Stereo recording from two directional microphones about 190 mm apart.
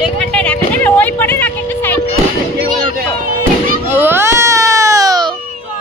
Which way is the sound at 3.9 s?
10° right (ahead or behind).